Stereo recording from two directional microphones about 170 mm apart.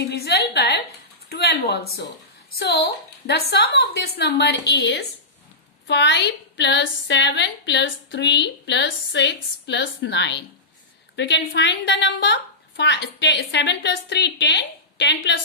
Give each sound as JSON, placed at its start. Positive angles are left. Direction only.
{"t": 0.0, "sound": "a sound", "side_deg": 70}
{"t": 1.3, "sound": "a woman's voice", "side_deg": 70}
{"t": 5.9, "sound": "a woman's voice", "side_deg": 90}